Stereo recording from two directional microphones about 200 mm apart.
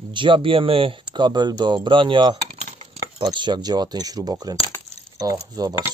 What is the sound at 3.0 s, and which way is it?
Speech, 20° right (ahead or behind).